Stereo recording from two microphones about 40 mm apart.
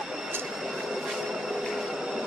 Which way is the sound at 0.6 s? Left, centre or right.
Centre.